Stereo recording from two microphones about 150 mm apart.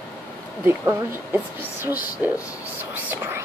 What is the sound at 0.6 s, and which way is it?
Speech, 15° right (ahead or behind).